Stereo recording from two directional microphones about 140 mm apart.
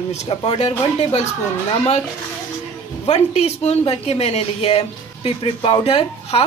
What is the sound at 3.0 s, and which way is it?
Speech, 50° left (ahead or behind).